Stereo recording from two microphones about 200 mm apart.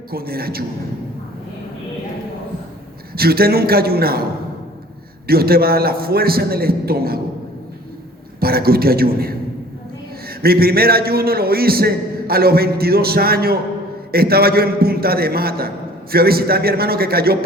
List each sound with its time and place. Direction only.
0.1 s a man's voice: 50° right (ahead or behind)
3.2 s a man's voice: 50° right (ahead or behind)
5.2 s a man's voice: 50° right (ahead or behind)
8.4 s a man's voice: 50° right (ahead or behind)